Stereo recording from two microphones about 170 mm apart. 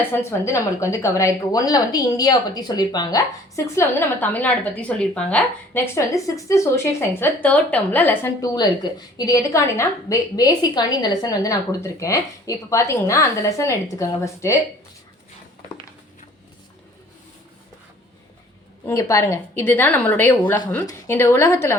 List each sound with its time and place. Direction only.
0.3 s a woman's voice: 15° left (ahead or behind)
8.5 s a woman's voice: 25° left (ahead or behind)
18.9 s a woman's voice: 15° left (ahead or behind)